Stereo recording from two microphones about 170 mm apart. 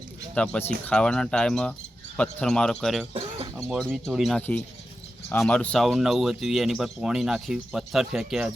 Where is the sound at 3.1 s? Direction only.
35° right (ahead or behind).